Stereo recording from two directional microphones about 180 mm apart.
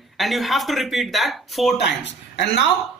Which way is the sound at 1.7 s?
70° left (ahead or behind).